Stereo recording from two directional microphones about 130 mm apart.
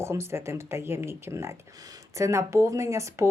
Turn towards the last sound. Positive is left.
turn(degrees=-20)  # may be behind; listen again after turning